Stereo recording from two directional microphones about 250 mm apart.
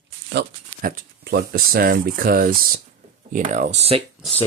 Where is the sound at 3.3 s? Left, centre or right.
Right.